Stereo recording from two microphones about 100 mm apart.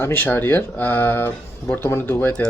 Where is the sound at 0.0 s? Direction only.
20° left (ahead or behind).